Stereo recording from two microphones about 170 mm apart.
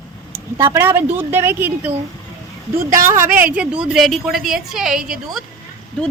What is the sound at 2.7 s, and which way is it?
Speech, 55° right (ahead or behind).